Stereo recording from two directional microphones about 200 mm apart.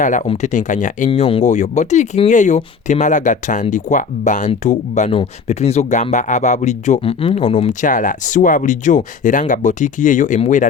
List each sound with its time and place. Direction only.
0.3 s speech: 35° left (ahead or behind)